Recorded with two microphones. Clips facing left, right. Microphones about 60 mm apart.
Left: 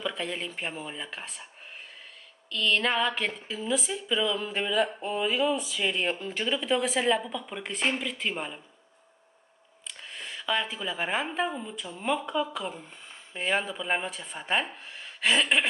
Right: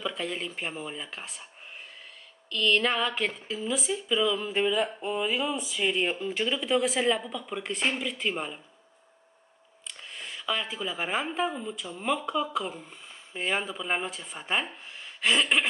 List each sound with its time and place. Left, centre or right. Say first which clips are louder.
0.0 s speech: even; centre
2.5 s speech: right 1 dB; centre
9.8 s speech: left 1 dB; centre